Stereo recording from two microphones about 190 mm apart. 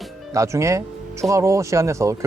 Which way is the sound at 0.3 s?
15° right (ahead or behind).